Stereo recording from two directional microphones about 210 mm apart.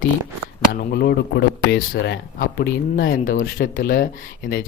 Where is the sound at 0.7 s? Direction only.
50° left (ahead or behind).